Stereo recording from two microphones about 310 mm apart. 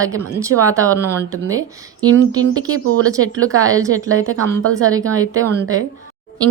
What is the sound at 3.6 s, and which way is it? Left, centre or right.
Speech, centre.